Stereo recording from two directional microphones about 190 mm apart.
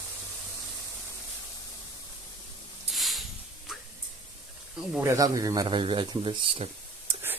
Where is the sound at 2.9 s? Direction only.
Centre (ahead or behind).